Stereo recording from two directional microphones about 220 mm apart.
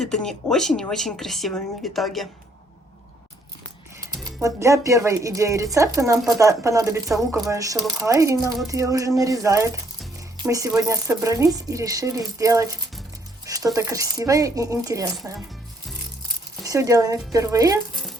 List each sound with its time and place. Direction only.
0.0 s speech: centre (ahead or behind)
4.2 s speech: 15° right (ahead or behind)
10.3 s music: 15° right (ahead or behind)
10.8 s speech: 15° right (ahead or behind)
13.4 s music: 15° right (ahead or behind)
13.7 s speech: 15° right (ahead or behind)
16.6 s speech: 15° right (ahead or behind)